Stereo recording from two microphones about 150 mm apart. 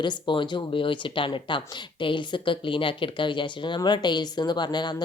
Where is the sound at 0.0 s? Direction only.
30° left (ahead or behind).